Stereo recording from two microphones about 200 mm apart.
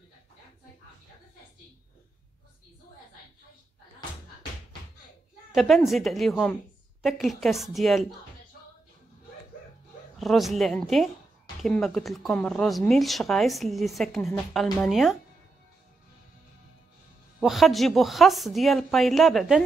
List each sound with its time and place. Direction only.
5.5 s speech: centre (ahead or behind)
10.1 s speech: centre (ahead or behind)
17.4 s speech: centre (ahead or behind)